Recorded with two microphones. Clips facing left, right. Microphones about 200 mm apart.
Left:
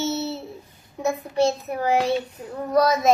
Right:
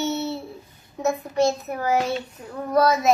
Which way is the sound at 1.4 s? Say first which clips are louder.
Left 1 dB; 30° left (ahead or behind).